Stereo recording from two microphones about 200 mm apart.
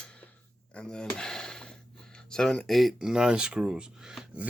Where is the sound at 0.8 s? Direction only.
5° left (ahead or behind).